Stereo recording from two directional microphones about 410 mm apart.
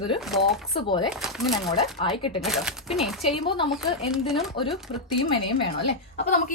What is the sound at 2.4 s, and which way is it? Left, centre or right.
Speech, centre.